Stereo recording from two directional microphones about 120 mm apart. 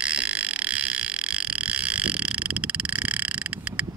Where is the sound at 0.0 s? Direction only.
10° right (ahead or behind).